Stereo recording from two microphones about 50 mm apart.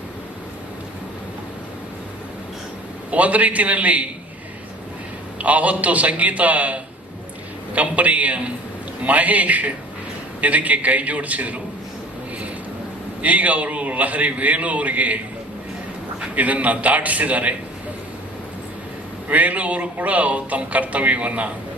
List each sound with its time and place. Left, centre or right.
3.1 s speech: right
5.4 s speech: right
13.2 s speech: right
16.3 s speech: right
19.3 s speech: right